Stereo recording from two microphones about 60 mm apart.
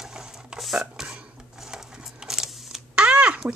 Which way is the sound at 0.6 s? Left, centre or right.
Centre.